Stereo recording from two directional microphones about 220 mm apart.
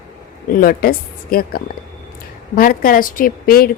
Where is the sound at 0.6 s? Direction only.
40° left (ahead or behind).